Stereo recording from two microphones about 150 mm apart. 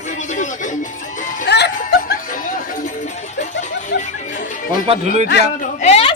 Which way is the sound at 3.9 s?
90° left.